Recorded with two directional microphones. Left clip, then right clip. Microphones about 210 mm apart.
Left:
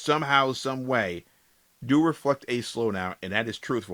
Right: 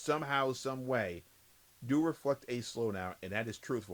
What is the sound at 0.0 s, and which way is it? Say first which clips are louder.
Speech: left 10 dB; 15° left (ahead or behind).